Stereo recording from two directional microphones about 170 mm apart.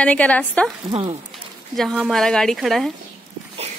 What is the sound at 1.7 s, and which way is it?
A woman's voice, centre (ahead or behind).